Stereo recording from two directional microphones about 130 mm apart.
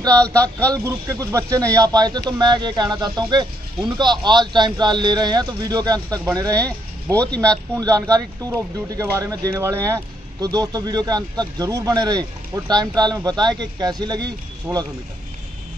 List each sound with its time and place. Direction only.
0.2 s speech: 10° left (ahead or behind)
0.8 s speech: 25° right (ahead or behind)
7.2 s speech: 10° left (ahead or behind)
7.7 s speech: 25° right (ahead or behind)